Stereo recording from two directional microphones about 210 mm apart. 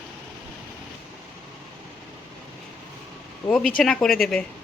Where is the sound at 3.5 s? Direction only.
5° left (ahead or behind).